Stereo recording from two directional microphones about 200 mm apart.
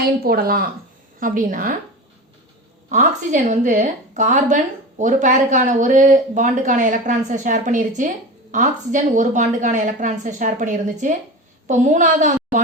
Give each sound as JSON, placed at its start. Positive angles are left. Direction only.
{"t": 0.0, "sound": "speech", "side_deg": -45}
{"t": 2.9, "sound": "a woman's voice", "side_deg": -40}